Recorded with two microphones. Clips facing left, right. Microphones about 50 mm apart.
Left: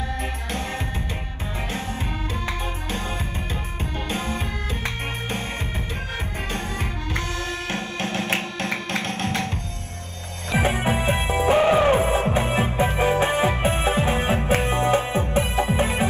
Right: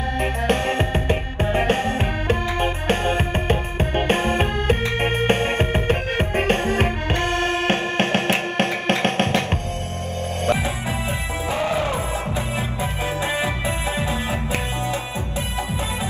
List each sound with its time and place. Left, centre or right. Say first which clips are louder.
1.0 s music: right 10 dB; right
10.6 s music: left 3 dB; left